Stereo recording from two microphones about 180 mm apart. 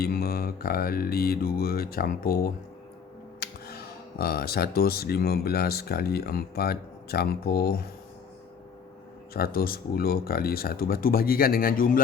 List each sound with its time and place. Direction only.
0.0 s speech: 55° left (ahead or behind)
9.3 s speech: 55° left (ahead or behind)